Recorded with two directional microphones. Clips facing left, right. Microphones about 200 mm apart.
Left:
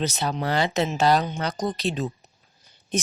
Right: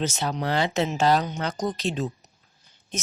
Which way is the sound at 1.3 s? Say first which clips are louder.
Left 1 dB; 35° left (ahead or behind).